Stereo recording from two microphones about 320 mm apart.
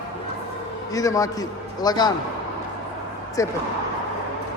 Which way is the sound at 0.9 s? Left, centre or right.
Centre.